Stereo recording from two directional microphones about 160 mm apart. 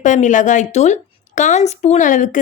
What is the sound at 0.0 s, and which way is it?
Speech, 50° left (ahead or behind).